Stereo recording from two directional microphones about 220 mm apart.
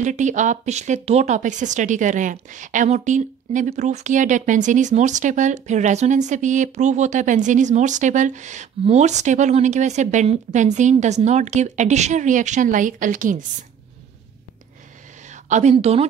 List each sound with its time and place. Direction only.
0.0 s speech: 35° right (ahead or behind)
15.2 s speech: 30° right (ahead or behind)